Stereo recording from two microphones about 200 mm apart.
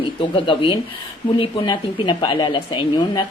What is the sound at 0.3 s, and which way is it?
A woman's voice, 25° left (ahead or behind).